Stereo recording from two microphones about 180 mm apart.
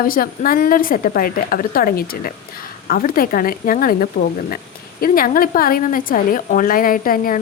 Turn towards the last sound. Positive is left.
turn(degrees=50)  # may be behind; listen again after turning